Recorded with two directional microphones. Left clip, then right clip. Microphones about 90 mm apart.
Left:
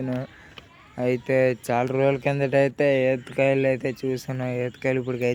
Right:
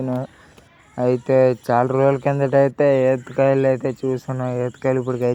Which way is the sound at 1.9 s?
25° right (ahead or behind).